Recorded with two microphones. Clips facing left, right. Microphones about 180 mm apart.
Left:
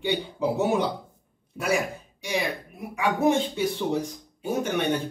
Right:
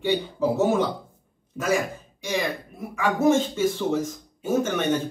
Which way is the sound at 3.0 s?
15° left (ahead or behind).